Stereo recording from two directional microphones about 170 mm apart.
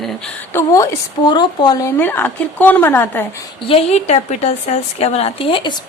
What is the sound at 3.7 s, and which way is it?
A woman's voice, 35° left (ahead or behind).